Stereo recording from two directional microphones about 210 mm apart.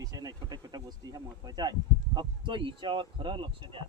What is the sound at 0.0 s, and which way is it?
Speech, 15° right (ahead or behind).